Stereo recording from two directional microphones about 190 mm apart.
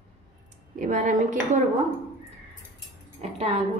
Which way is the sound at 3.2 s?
35° right (ahead or behind).